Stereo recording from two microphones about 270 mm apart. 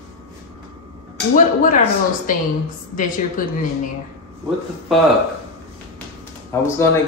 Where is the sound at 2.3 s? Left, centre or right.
Left.